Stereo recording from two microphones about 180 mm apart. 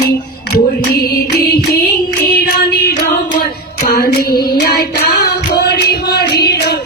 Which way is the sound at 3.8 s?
60° left (ahead or behind).